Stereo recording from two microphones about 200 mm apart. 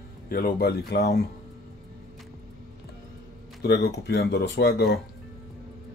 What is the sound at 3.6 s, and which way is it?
Speech, 55° left (ahead or behind).